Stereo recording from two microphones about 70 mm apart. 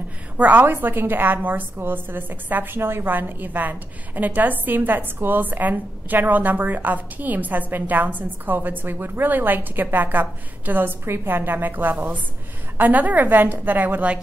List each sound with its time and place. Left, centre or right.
0.4 s a woman's voice: right